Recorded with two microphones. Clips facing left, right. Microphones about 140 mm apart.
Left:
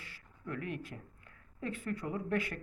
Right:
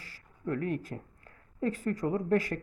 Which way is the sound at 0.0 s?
40° right (ahead or behind).